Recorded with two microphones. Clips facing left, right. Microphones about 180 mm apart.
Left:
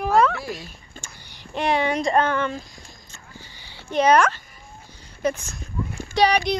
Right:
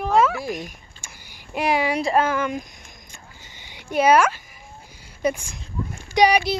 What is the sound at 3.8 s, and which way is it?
A woman's voice, 10° right (ahead or behind).